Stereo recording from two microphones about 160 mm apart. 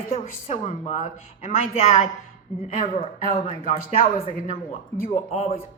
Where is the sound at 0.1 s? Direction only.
40° left (ahead or behind).